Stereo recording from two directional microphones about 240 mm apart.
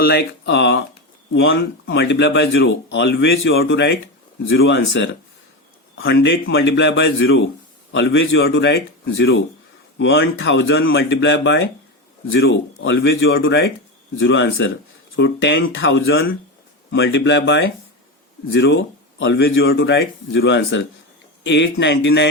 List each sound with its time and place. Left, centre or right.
0.0 s speech: left